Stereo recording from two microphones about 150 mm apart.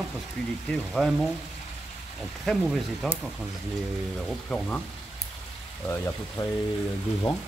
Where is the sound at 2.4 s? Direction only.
Centre (ahead or behind).